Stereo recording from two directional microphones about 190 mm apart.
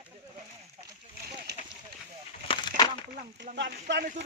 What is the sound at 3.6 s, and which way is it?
Speech, 65° right (ahead or behind).